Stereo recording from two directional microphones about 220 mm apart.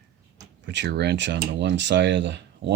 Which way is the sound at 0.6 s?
50° right (ahead or behind).